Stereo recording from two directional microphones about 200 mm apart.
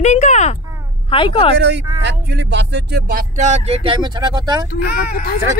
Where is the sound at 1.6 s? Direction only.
60° right (ahead or behind); by 4.6 s 20° right (ahead or behind).